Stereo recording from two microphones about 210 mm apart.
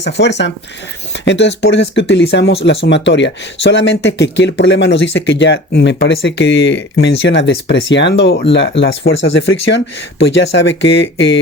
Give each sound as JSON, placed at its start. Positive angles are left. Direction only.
{"t": 0.0, "sound": "speech", "side_deg": 55}
{"t": 10.2, "sound": "speech", "side_deg": 55}